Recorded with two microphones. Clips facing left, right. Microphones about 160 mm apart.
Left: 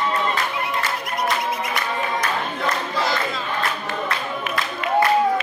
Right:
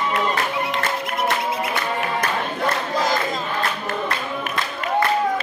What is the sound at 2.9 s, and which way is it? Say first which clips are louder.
Battle cry: right 3 dB; 45° right (ahead or behind).